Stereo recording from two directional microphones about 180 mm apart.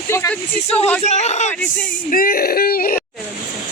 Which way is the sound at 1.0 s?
40° left (ahead or behind).